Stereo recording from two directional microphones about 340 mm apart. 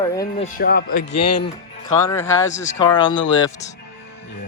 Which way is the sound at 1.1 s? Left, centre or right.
Left.